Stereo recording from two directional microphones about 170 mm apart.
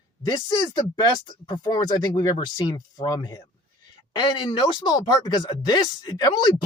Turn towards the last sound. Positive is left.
turn(degrees=25)  # may be behind; listen again after turning